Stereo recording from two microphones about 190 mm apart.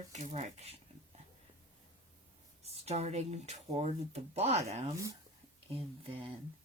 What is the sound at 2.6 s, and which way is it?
Speech, 35° right (ahead or behind).